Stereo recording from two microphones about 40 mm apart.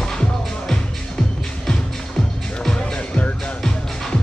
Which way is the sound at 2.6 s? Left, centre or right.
Left.